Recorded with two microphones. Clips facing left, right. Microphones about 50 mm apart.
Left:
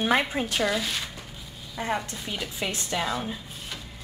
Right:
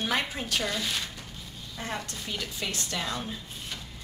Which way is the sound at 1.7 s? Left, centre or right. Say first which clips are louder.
Left 6 dB; centre.